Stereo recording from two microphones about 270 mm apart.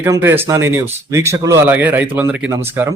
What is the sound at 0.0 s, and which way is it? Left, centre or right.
A man's voice, centre.